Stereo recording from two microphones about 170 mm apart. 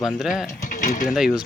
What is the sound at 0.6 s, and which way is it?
Speech, 50° left (ahead or behind).